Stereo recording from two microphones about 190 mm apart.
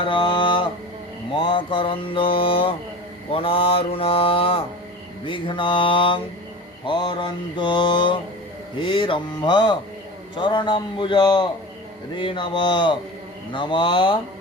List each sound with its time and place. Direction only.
0.0 s mantra: 25° left (ahead or behind)